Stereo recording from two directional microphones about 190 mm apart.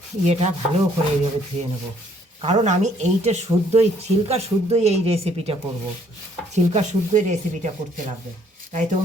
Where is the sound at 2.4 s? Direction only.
35° right (ahead or behind).